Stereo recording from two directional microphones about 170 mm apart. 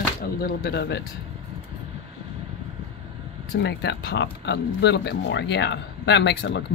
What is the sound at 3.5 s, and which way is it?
Speech, 85° left.